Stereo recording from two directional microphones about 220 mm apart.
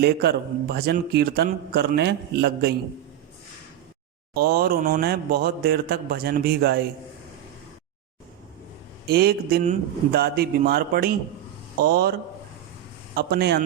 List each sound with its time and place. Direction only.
0.0 s a man's voice: 45° right (ahead or behind)
4.4 s a man's voice: 40° right (ahead or behind)
9.0 s a man's voice: 45° right (ahead or behind)
13.1 s a man's voice: 45° right (ahead or behind)